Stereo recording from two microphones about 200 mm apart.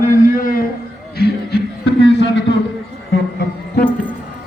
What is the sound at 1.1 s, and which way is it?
Music, 50° left (ahead or behind).